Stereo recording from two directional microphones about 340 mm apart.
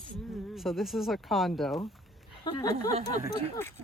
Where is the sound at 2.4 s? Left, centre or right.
Centre.